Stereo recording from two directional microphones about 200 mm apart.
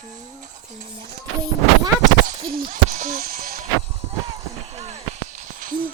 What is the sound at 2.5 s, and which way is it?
Speech, 45° right (ahead or behind).